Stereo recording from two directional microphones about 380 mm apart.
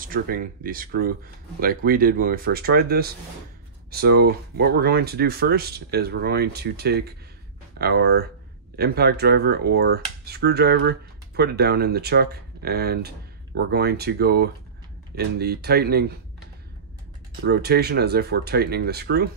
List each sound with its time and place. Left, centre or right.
0.0 s speech: right
17.4 s speech: right